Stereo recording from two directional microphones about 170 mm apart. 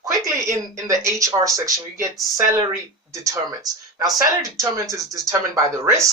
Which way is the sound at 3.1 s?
20° right (ahead or behind).